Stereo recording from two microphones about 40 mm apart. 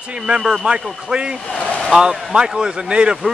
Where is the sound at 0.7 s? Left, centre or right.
Right.